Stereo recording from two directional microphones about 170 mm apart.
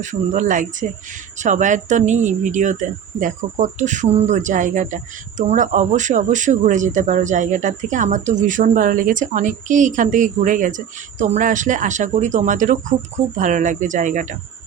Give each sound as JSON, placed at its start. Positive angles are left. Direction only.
{"t": 0.0, "sound": "speech", "side_deg": -45}